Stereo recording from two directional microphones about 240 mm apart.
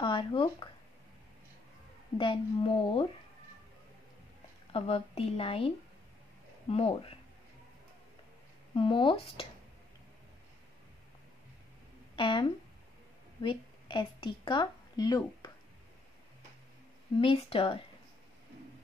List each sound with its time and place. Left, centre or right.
0.0 s a woman's voice: centre
2.1 s a woman's voice: left
4.7 s a woman's voice: left
6.7 s a woman's voice: left
8.7 s a woman's voice: left
12.2 s a woman's voice: left
17.2 s a woman's voice: left